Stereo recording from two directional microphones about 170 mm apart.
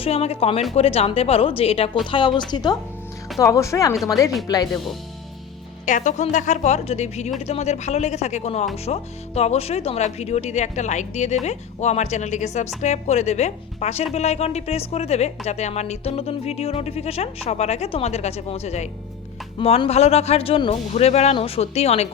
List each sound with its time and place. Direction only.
0.0 s speech: 35° left (ahead or behind)
5.8 s a woman's voice: 45° left (ahead or behind)